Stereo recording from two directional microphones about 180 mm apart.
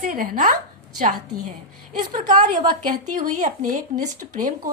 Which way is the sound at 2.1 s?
45° right (ahead or behind).